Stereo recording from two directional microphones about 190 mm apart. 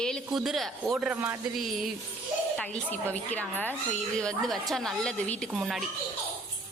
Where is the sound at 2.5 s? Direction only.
5° left (ahead or behind).